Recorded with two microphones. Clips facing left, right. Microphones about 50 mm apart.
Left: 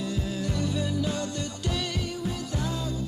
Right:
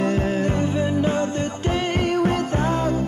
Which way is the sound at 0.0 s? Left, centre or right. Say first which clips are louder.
Right 10 dB; right.